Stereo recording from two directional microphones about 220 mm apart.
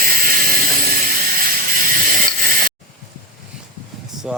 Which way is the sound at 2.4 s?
40° right (ahead or behind).